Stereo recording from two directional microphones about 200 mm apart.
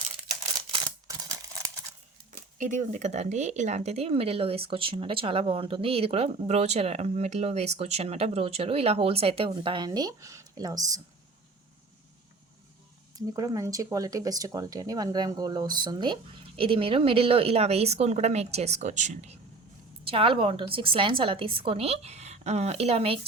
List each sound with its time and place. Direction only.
2.6 s speech: 40° right (ahead or behind); by 11.0 s 20° right (ahead or behind)
13.1 s a woman's voice: 20° right (ahead or behind)